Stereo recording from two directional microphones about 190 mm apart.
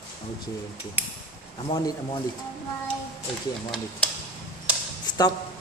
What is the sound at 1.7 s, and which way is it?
Speech, 20° left (ahead or behind).